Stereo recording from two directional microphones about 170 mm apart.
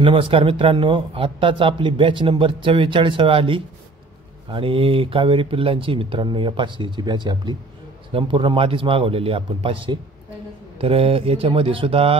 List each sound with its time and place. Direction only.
0.0 s speech: 30° right (ahead or behind)